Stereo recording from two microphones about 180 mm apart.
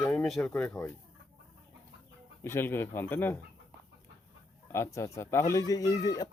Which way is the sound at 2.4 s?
15° left (ahead or behind).